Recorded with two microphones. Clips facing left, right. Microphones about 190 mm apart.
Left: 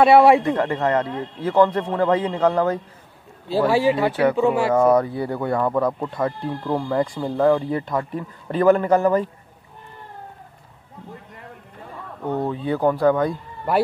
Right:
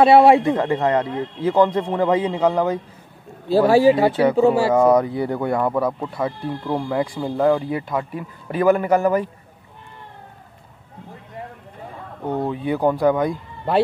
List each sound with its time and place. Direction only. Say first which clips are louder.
0.0 s speech: right 1 dB; 25° right (ahead or behind)
0.5 s speech: right 2 dB; 15° right (ahead or behind)
3.4 s speech: right 4 dB; 45° right (ahead or behind)
4.1 s speech: right 1 dB; 15° right (ahead or behind)
4.4 s speech: right 3 dB; 35° right (ahead or behind)
4.7 s speech: right 1 dB; 15° right (ahead or behind)
12.3 s speech: right 1 dB; 15° right (ahead or behind)